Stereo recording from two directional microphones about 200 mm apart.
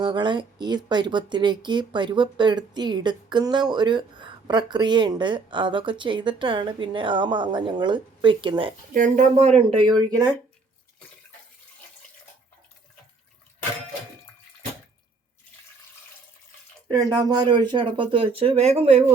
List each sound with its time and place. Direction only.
0.0 s speech: 25° right (ahead or behind)
8.9 s speech: 40° right (ahead or behind)
9.6 s speech: 25° right (ahead or behind)
17.2 s speech: 20° right (ahead or behind)